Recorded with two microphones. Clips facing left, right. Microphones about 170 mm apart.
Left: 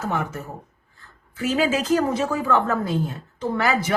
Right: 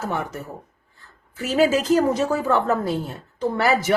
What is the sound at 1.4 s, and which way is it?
Speech, 40° right (ahead or behind).